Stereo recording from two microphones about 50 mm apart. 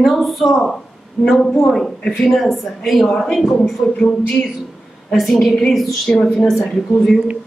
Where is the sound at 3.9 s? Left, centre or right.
Left.